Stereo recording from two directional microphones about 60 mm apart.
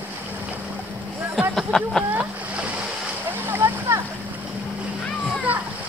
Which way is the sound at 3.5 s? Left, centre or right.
Right.